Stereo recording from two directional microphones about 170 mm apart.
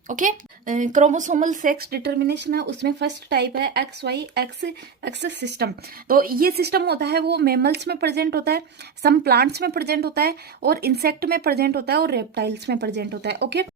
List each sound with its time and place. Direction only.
0.1 s speech: 50° right (ahead or behind); by 13.7 s 85° right